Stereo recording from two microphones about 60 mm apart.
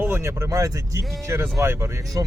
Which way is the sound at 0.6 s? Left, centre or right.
Right.